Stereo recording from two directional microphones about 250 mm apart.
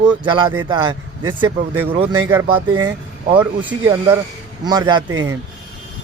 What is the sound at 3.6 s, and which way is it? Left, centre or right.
A man's voice, centre.